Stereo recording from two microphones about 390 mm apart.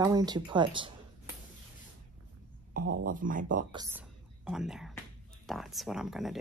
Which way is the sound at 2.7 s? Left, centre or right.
Right.